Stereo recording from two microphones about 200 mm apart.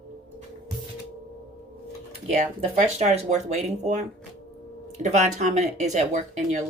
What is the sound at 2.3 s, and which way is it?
Speech, 30° right (ahead or behind).